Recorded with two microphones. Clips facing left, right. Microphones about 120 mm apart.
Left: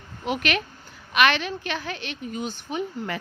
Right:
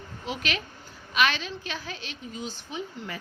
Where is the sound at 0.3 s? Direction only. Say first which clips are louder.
Left 6 dB; 65° left (ahead or behind).